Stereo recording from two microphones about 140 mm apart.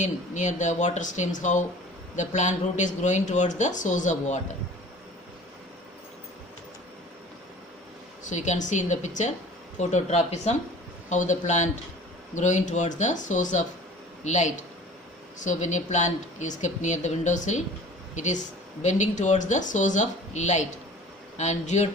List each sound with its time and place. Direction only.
0.0 s speech: 60° left (ahead or behind)
8.2 s speech: 55° left (ahead or behind)